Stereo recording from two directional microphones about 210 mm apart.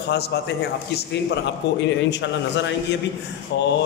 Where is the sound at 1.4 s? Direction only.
55° left (ahead or behind).